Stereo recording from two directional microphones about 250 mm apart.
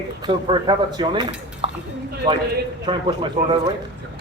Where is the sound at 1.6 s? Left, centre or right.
Right.